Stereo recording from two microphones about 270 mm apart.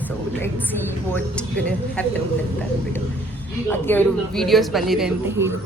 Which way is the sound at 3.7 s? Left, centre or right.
Centre.